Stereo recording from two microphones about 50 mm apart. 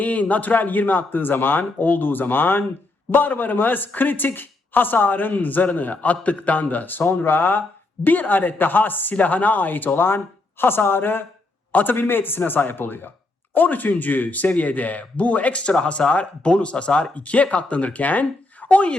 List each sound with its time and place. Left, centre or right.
0.0 s speech: left